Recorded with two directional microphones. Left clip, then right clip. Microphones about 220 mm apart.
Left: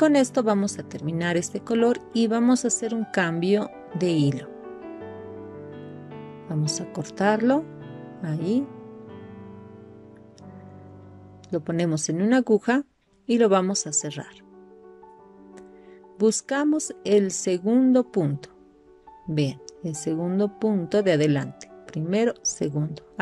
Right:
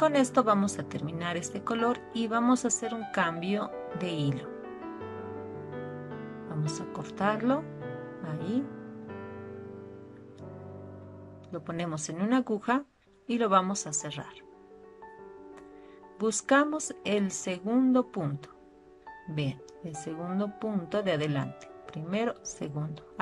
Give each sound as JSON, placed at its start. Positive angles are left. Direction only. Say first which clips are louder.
{"t": 0.0, "sound": "a woman's voice", "louder": "left 4 dB", "side_deg": 30}
{"t": 6.5, "sound": "a woman's voice", "louder": "left 7 dB", "side_deg": 30}
{"t": 11.5, "sound": "a woman's voice", "louder": "left 9 dB", "side_deg": 30}
{"t": 16.3, "sound": "a woman's voice", "louder": "left 2 dB", "side_deg": 30}
{"t": 19.3, "sound": "a woman's voice", "louder": "left 9 dB", "side_deg": 30}